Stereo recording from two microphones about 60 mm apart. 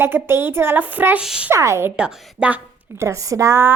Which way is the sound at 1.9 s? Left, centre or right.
Centre.